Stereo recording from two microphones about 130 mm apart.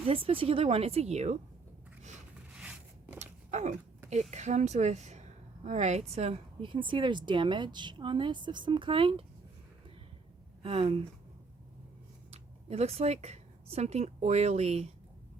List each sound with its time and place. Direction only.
0.0 s speech: 45° right (ahead or behind)
2.6 s a sound: 10° right (ahead or behind)
3.2 s a sound: 60° right (ahead or behind)
4.1 s a woman's voice: 60° right (ahead or behind)
6.6 s speech: 40° right (ahead or behind)
10.6 s speech: 45° right (ahead or behind)
12.3 s speech: 55° right (ahead or behind)